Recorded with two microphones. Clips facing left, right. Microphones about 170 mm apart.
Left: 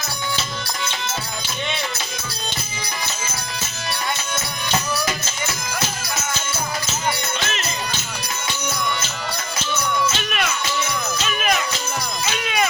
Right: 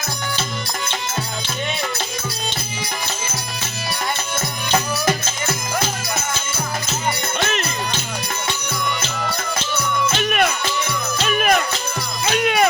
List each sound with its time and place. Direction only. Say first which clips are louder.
7.3 s music: right 5 dB; 55° right (ahead or behind)
10.1 s music: right 5 dB; 55° right (ahead or behind)